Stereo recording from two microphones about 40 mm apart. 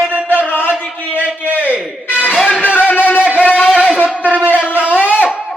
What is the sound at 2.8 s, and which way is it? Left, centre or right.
Music, left.